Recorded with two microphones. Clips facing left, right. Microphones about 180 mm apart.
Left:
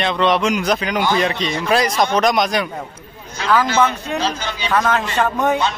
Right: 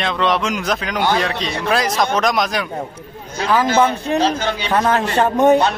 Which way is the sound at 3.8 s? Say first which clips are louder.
Right 3 dB; 30° right (ahead or behind).